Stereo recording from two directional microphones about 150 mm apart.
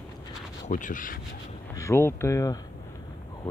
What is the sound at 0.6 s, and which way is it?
Speech, 60° left (ahead or behind).